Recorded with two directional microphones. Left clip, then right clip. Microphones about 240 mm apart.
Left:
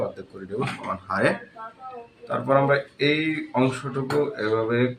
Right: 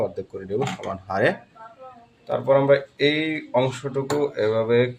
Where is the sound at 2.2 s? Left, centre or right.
Right.